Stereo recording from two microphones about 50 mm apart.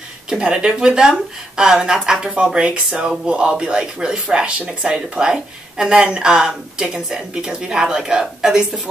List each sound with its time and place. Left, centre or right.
0.3 s speech: centre